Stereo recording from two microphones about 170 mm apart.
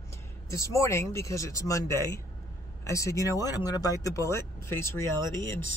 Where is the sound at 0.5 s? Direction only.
20° left (ahead or behind).